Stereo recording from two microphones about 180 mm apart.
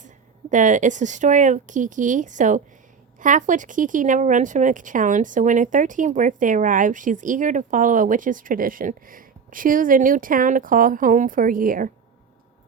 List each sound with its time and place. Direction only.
0.5 s speech: 45° right (ahead or behind)